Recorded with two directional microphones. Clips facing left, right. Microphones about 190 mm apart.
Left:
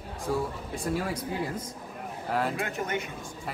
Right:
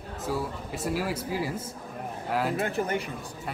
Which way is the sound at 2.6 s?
35° right (ahead or behind).